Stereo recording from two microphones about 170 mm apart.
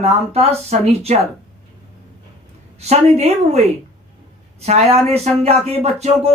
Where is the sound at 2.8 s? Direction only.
40° right (ahead or behind).